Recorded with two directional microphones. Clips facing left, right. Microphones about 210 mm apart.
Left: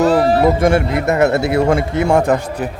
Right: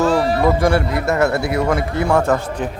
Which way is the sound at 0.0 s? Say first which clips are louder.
Left 3 dB; 35° left (ahead or behind).